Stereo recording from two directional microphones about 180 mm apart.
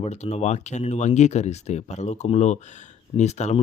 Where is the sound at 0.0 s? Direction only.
35° left (ahead or behind).